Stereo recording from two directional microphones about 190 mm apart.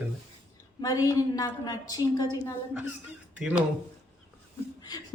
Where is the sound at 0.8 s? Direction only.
20° left (ahead or behind).